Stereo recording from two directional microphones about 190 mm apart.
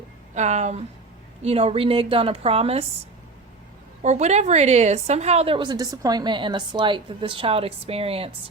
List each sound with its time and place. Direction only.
0.3 s a woman's voice: 35° right (ahead or behind)
4.0 s a woman's voice: 35° right (ahead or behind)